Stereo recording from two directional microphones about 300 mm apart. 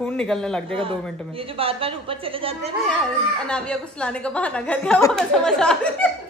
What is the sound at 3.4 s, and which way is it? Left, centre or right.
A woman's voice, centre.